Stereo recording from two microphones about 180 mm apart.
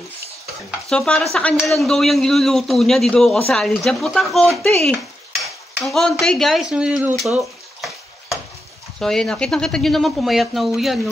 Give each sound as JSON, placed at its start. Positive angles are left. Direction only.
{"t": 0.7, "sound": "speech", "side_deg": 5}
{"t": 5.4, "sound": "dishes", "side_deg": 0}
{"t": 9.0, "sound": "speech", "side_deg": 5}